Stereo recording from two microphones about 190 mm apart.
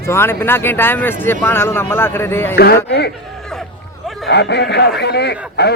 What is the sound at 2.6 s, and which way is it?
Speech, 55° left (ahead or behind).